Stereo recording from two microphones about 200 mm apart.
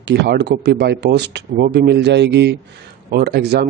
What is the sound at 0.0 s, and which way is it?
Speech, 60° right (ahead or behind).